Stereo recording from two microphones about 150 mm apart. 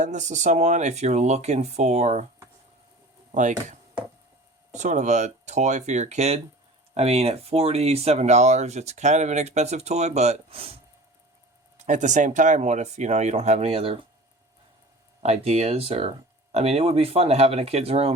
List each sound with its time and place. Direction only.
0.0 s speech: 55° right (ahead or behind)
3.3 s chopping: 55° right (ahead or behind)
4.7 s speech: 55° right (ahead or behind)
11.8 s speech: 55° right (ahead or behind)
15.2 s speech: 45° right (ahead or behind)